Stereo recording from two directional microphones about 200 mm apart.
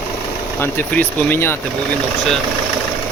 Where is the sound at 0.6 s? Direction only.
10° left (ahead or behind).